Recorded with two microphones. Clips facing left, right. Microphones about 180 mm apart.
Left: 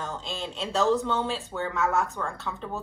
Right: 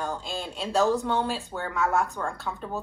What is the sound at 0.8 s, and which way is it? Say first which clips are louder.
Speech: right 1 dB; 15° right (ahead or behind).